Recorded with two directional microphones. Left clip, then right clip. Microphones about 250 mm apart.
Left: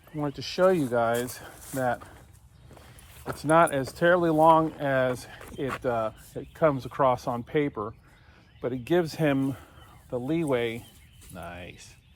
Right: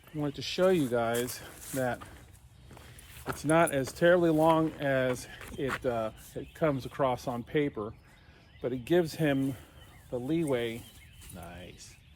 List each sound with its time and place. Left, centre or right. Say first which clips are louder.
0.2 s speech: left 4 dB; centre
2.7 s walk: even; centre
3.4 s speech: left 5 dB; centre